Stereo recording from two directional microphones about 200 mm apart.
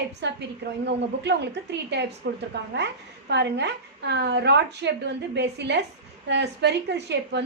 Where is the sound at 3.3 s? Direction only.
60° right (ahead or behind).